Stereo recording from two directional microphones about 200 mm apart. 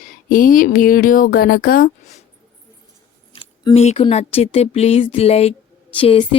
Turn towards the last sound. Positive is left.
turn(degrees=25)  # may be behind; listen again after turning